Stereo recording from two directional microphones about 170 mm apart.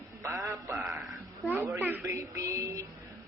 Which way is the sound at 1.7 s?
10° right (ahead or behind).